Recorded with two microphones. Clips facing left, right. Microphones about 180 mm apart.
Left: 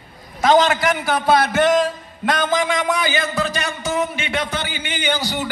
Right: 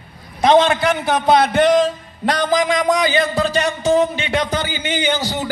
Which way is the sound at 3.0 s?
30° right (ahead or behind).